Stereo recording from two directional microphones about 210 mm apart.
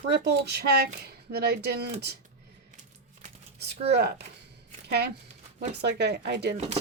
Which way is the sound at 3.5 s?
55° right (ahead or behind).